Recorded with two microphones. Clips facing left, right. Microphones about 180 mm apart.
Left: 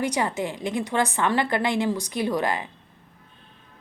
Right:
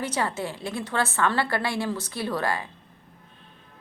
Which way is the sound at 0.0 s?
15° left (ahead or behind).